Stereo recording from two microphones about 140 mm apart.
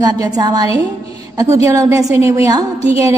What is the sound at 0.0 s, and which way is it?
A woman's voice, 30° right (ahead or behind).